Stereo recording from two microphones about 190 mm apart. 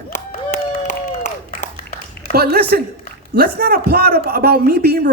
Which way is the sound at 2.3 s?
55° right (ahead or behind).